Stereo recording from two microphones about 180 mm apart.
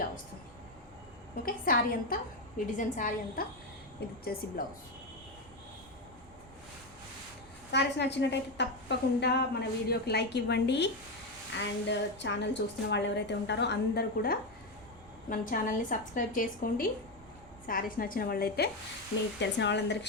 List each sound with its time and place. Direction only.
1.5 s a woman's voice: 50° left (ahead or behind)
7.7 s a woman's voice: 70° left (ahead or behind)
15.3 s a woman's voice: 50° left (ahead or behind)
19.4 s a woman's voice: 75° left (ahead or behind)